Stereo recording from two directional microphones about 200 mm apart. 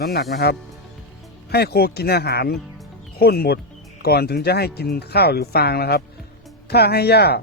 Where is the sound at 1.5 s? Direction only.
55° left (ahead or behind).